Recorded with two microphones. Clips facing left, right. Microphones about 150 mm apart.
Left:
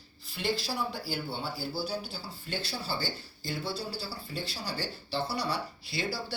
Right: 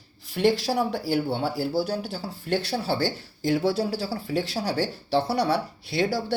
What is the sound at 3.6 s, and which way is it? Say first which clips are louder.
Speech: right 11 dB; 90° right.